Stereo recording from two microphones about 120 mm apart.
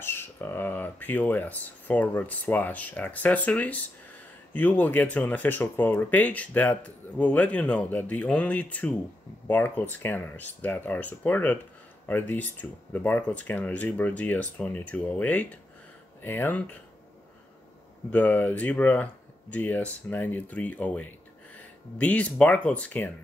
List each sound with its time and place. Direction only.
0.0 s speech: 20° left (ahead or behind)
18.1 s speech: 15° left (ahead or behind)